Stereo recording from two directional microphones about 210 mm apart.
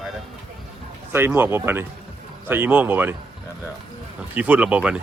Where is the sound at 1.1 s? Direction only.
10° right (ahead or behind).